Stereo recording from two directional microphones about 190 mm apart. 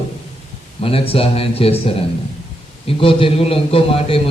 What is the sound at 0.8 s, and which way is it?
A man's voice, 30° left (ahead or behind).